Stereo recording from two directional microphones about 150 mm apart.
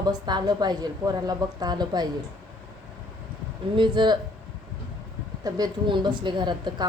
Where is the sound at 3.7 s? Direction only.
30° right (ahead or behind).